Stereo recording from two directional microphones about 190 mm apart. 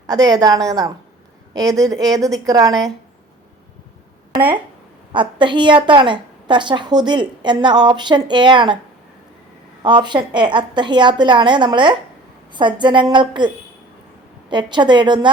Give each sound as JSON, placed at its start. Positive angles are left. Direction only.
{"t": 0.1, "sound": "a woman's voice", "side_deg": -20}
{"t": 5.1, "sound": "a woman's voice", "side_deg": -25}
{"t": 9.8, "sound": "a woman's voice", "side_deg": -25}
{"t": 14.5, "sound": "a woman's voice", "side_deg": -25}